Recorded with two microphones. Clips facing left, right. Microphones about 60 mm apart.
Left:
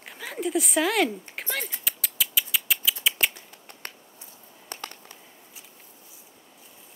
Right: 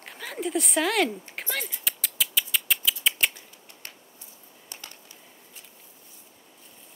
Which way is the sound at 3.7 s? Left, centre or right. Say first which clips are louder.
Left 3 dB; left.